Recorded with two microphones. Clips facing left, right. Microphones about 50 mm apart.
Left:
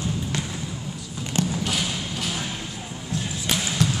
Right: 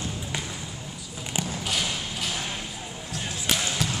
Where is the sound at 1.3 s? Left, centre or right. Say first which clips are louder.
Left 4 dB; centre.